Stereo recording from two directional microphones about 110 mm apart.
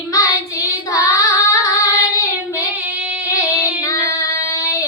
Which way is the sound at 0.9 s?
30° left (ahead or behind).